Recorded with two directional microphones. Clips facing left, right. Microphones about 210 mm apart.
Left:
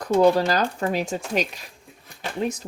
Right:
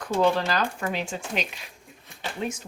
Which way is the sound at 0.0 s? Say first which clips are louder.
Left 5 dB; 40° left (ahead or behind).